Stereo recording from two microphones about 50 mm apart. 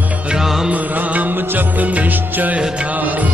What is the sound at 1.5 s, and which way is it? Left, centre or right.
Music, right.